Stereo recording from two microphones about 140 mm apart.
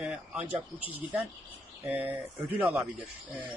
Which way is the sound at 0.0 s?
10° right (ahead or behind).